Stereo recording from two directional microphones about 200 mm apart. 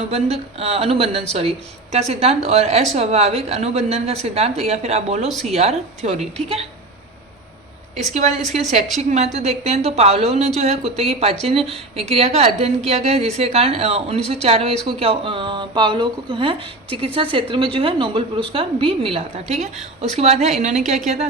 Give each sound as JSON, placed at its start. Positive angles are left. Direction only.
{"t": 0.0, "sound": "a woman's voice", "side_deg": -30}
{"t": 8.1, "sound": "a woman's voice", "side_deg": -35}